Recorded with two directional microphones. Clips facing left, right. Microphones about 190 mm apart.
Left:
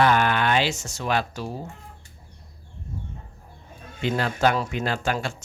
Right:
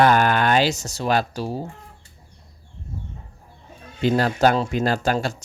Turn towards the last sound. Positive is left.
turn(degrees=-40)  # may be behind; listen again after turning